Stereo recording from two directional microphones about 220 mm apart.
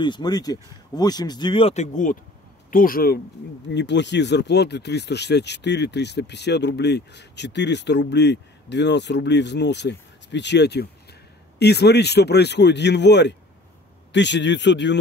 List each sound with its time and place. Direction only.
0.0 s speech: 20° left (ahead or behind); by 3.2 s 40° left (ahead or behind)
3.7 s speech: 55° left (ahead or behind)